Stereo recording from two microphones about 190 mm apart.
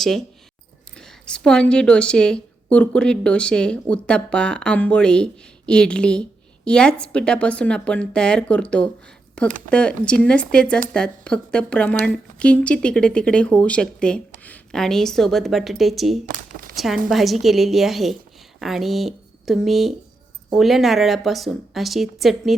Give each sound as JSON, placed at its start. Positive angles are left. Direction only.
{"t": 0.0, "sound": "a woman's voice", "side_deg": 0}
{"t": 16.2, "sound": "a sound", "side_deg": -50}
{"t": 16.7, "sound": "a woman's voice", "side_deg": 0}